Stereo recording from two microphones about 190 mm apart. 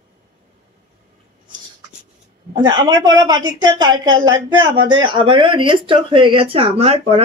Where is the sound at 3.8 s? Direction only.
90° right.